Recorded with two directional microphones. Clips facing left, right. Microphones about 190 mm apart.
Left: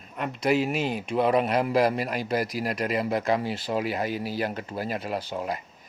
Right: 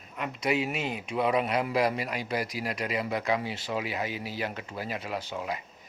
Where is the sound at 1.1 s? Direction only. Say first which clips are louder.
Left 4 dB; 40° left (ahead or behind).